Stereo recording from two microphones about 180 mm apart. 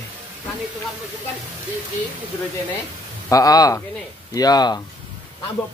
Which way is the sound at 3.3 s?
20° left (ahead or behind).